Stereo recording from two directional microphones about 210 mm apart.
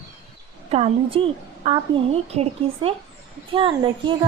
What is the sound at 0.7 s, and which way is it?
A woman's voice, 25° right (ahead or behind).